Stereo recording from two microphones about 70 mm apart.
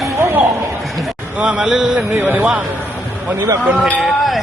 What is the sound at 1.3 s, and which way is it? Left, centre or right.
Speech, centre.